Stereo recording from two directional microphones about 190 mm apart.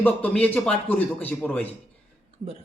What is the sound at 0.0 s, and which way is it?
Speech, 10° left (ahead or behind).